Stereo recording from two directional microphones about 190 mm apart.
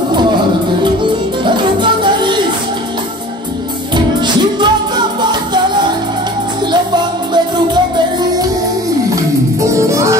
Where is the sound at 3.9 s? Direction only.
25° right (ahead or behind).